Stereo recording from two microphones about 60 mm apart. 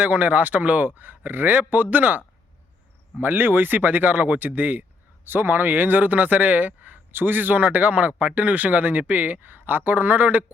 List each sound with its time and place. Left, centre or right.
0.0 s speech: right